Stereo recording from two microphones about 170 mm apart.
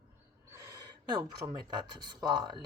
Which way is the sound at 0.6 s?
15° right (ahead or behind).